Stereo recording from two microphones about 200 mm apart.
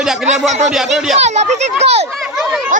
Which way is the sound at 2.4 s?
Centre (ahead or behind).